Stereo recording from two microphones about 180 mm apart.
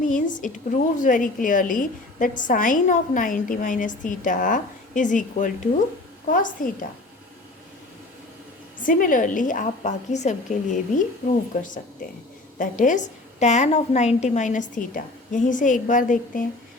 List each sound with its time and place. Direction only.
0.0 s a woman's voice: 45° left (ahead or behind)
8.8 s a woman's voice: 50° left (ahead or behind)